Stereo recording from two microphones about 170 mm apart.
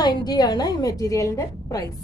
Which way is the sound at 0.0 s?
25° left (ahead or behind).